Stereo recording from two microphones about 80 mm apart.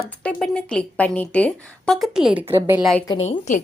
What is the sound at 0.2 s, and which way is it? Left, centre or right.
A woman's voice, centre.